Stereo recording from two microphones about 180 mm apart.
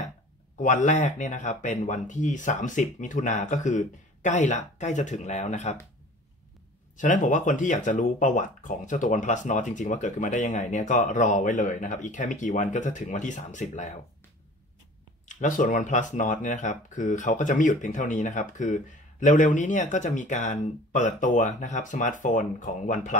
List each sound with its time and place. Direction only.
0.6 s speech: 40° left (ahead or behind)
7.0 s speech: 45° left (ahead or behind)
15.2 s speech: 45° left (ahead or behind)